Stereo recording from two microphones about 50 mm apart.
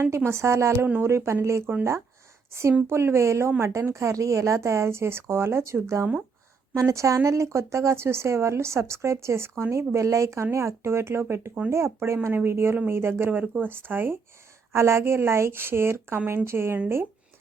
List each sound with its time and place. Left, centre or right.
0.3 s speech: right
1.0 s a woman's voice: right
3.6 s speech: right
6.7 s a woman's voice: right
13.4 s speech: right
14.7 s a woman's voice: right